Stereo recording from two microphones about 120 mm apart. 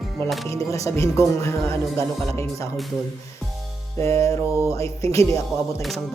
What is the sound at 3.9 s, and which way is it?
Speech, 25° left (ahead or behind).